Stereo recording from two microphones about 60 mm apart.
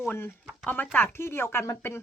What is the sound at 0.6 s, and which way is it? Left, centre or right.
Speech, left.